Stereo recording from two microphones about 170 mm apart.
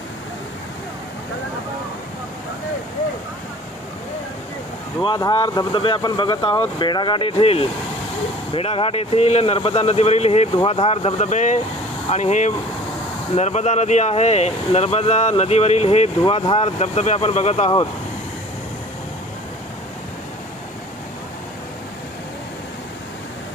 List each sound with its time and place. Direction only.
5.0 s speech: 25° left (ahead or behind)